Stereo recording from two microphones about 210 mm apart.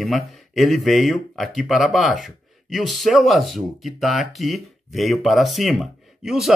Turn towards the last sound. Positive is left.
turn(degrees=0)  # may be behind; listen again after turning